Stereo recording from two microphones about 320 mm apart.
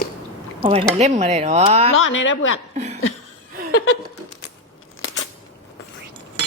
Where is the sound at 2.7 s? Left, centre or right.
Right.